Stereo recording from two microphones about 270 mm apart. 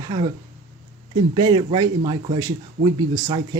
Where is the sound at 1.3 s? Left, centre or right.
Centre.